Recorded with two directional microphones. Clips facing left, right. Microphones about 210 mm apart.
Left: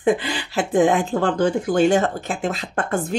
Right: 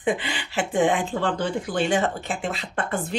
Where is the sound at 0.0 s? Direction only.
40° left (ahead or behind).